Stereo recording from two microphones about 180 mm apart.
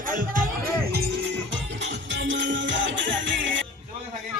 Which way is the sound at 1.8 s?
90° right.